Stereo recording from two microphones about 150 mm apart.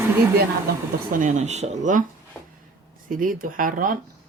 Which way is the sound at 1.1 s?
55° right (ahead or behind).